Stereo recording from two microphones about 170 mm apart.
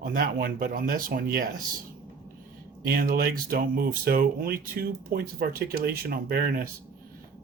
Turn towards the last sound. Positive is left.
turn(degrees=-60)  # may be behind; listen again after turning